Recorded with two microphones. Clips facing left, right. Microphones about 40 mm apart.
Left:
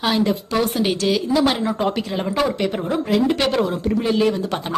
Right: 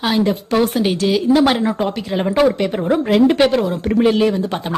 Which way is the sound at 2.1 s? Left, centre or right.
Centre.